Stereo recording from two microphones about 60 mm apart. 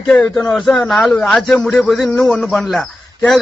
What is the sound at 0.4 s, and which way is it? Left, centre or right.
Speech, centre.